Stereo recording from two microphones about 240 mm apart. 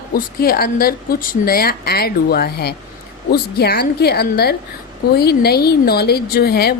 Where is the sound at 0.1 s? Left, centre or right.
Left.